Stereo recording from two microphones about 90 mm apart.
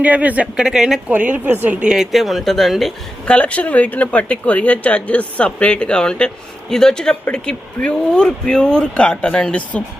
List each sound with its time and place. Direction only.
0.0 s speech: 15° right (ahead or behind)
1.1 s a woman's voice: 15° right (ahead or behind); by 2.9 s centre (ahead or behind)
3.2 s speech: 15° left (ahead or behind)